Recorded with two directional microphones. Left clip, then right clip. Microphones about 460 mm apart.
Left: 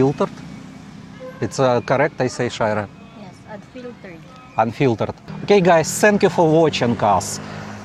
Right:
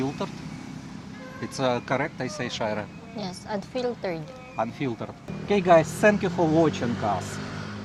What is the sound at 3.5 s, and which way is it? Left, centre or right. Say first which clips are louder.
Speech: right 6 dB; right.